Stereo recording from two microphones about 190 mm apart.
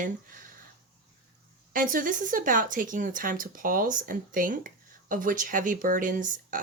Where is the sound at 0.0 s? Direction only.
45° right (ahead or behind).